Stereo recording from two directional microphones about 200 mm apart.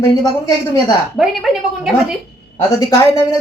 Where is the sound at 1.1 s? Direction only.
Centre (ahead or behind).